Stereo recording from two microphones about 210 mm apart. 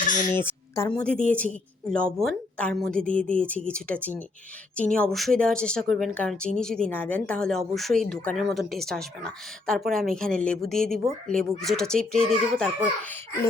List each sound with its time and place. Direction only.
0.3 s a child's voice: 10° left (ahead or behind)